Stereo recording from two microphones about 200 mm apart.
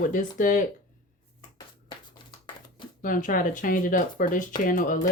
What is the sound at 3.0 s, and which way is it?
Speech, 45° left (ahead or behind).